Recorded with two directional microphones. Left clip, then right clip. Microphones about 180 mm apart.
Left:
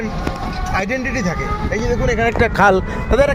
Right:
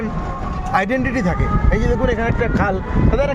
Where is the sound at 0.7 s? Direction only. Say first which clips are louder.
Right 3 dB; 5° right (ahead or behind).